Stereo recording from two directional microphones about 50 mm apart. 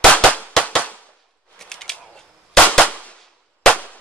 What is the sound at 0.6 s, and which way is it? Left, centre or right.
Firecracker, left.